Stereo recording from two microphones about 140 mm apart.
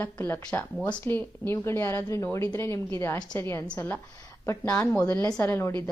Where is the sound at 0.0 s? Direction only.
15° left (ahead or behind).